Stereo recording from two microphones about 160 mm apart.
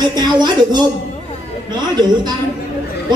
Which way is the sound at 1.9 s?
25° right (ahead or behind).